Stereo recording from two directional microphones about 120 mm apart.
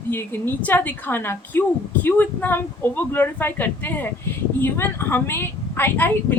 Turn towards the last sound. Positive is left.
turn(degrees=15)  # may be behind; listen again after turning